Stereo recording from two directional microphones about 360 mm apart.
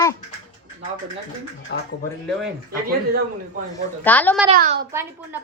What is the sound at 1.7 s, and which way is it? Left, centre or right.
Speech, left.